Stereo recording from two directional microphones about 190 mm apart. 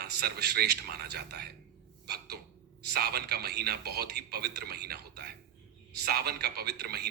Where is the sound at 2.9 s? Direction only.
55° right (ahead or behind).